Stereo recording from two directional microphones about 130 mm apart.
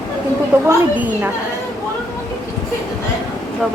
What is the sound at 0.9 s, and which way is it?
Speech, 10° right (ahead or behind).